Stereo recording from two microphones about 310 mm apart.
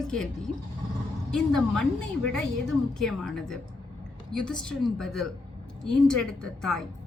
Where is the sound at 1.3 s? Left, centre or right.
Centre.